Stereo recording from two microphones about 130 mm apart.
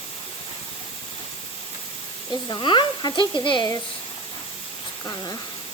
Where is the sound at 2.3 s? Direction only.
35° left (ahead or behind).